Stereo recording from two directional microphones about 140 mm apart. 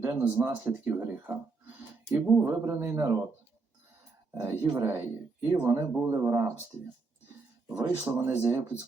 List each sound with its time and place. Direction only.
0.0 s speech: 15° right (ahead or behind)
4.4 s speech: 20° right (ahead or behind)
7.8 s speech: 20° right (ahead or behind)